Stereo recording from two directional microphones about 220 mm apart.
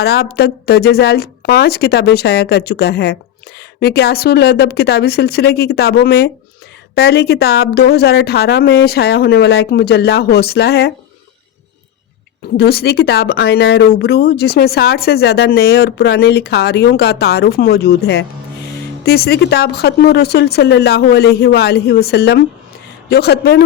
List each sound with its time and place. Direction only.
0.0 s speech: 45° left (ahead or behind)
12.5 s speech: 45° left (ahead or behind)